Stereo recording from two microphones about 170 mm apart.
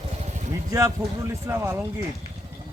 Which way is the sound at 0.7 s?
15° right (ahead or behind).